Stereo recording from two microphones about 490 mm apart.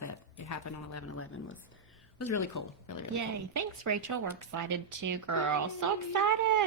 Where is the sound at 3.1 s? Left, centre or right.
Right.